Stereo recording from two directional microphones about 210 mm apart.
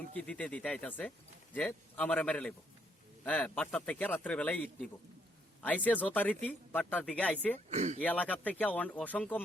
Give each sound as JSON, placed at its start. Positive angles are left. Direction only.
{"t": 0.2, "sound": "speech", "side_deg": 5}
{"t": 7.7, "sound": "speech", "side_deg": -35}
{"t": 7.9, "sound": "speech", "side_deg": 5}